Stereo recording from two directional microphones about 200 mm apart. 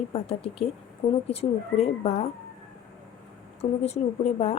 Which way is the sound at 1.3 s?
30° left (ahead or behind).